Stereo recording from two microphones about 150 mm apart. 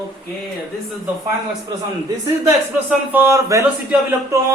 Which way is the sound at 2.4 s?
10° right (ahead or behind).